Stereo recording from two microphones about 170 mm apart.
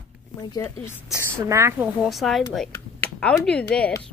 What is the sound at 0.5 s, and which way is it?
Speech, 15° left (ahead or behind).